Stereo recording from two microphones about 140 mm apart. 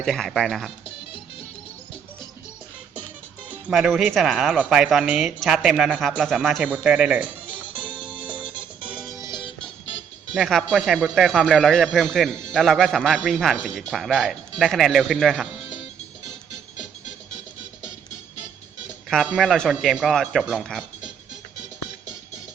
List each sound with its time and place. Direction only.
0.0 s speech: centre (ahead or behind)
3.7 s speech: centre (ahead or behind)
8.5 s music: 10° right (ahead or behind)
9.2 s music: 35° left (ahead or behind)
10.3 s speech: centre (ahead or behind)
19.0 s speech: centre (ahead or behind)